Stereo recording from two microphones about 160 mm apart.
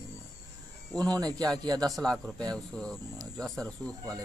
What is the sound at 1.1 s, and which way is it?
Speech, 25° right (ahead or behind).